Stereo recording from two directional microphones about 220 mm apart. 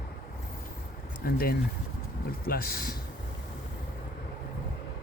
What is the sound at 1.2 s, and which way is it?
Speech, 45° left (ahead or behind).